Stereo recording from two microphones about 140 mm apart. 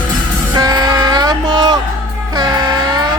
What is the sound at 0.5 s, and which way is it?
Music, 25° right (ahead or behind).